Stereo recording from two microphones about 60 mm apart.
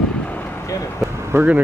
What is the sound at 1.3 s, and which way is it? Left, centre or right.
Speech, right.